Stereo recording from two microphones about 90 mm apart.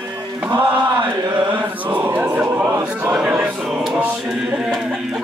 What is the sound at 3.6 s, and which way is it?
Music, 5° right (ahead or behind).